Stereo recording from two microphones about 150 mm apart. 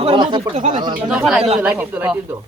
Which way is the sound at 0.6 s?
55° right (ahead or behind).